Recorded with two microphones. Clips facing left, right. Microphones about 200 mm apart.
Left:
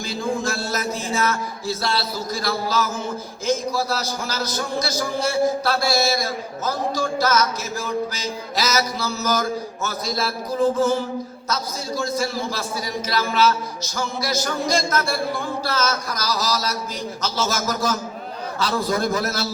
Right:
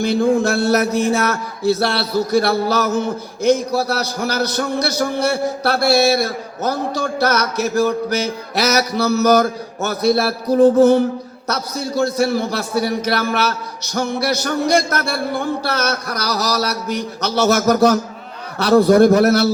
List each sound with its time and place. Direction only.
0.0 s a man's voice: 65° right (ahead or behind)